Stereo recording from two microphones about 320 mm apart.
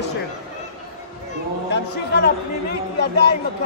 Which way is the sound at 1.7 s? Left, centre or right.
Left.